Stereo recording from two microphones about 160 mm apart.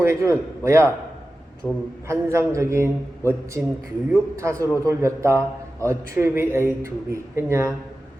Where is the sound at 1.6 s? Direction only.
10° left (ahead or behind).